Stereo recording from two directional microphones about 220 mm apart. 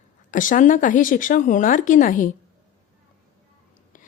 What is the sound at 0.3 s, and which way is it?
Speech, 35° left (ahead or behind).